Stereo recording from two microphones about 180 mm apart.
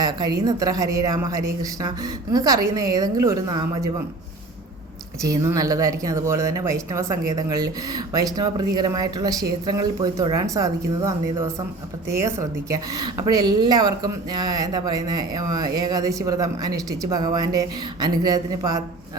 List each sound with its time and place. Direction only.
0.0 s a woman's voice: 20° right (ahead or behind)
5.2 s a woman's voice: 20° right (ahead or behind)